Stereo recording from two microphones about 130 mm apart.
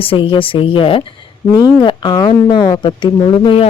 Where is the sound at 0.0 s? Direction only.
45° left (ahead or behind).